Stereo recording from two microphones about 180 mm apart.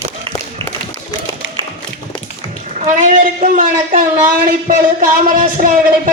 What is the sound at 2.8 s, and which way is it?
A woman's voice, 45° right (ahead or behind).